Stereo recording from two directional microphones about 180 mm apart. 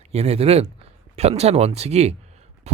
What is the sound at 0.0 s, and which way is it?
Speech, 35° right (ahead or behind).